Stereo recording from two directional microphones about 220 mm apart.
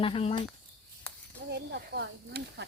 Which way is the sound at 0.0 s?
25° left (ahead or behind).